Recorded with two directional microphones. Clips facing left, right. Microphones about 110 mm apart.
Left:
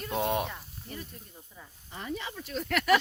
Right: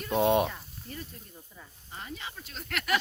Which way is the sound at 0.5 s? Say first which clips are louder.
Left 1 dB; 15° left (ahead or behind).